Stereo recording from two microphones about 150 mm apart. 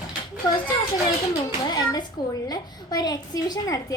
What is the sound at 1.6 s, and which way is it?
A child's voice, 25° left (ahead or behind).